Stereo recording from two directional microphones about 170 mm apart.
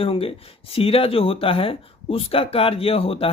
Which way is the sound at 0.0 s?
35° left (ahead or behind).